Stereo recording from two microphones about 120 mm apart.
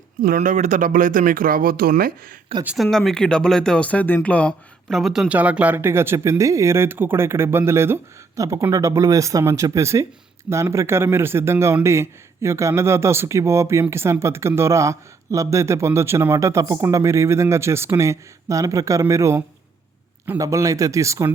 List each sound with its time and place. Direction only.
0.4 s speech: 85° right
2.7 s speech: centre (ahead or behind); by 19.4 s 25° right (ahead or behind)
20.4 s speech: 25° right (ahead or behind)